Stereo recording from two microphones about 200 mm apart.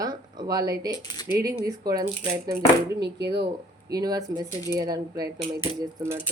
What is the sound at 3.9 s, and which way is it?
Speech, 20° right (ahead or behind).